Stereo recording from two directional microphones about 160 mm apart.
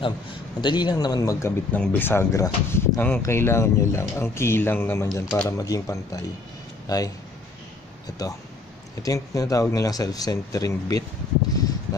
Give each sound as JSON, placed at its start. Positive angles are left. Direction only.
{"t": 0.0, "sound": "speech", "side_deg": 30}
{"t": 8.2, "sound": "speech", "side_deg": 25}